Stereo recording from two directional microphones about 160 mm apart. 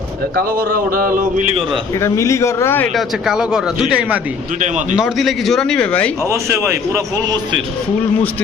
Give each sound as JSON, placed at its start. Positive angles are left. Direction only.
{"t": 0.3, "sound": "speech", "side_deg": -65}
{"t": 2.0, "sound": "a man's voice", "side_deg": 20}
{"t": 2.9, "sound": "speech", "side_deg": -5}
{"t": 6.2, "sound": "a man's voice", "side_deg": -20}